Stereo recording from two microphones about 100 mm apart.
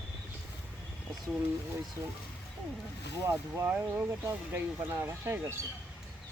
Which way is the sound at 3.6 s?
30° right (ahead or behind).